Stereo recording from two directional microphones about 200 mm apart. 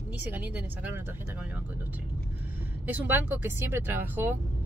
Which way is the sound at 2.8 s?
10° right (ahead or behind).